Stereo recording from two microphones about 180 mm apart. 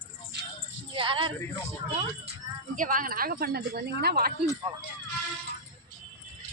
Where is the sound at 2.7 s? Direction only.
50° right (ahead or behind).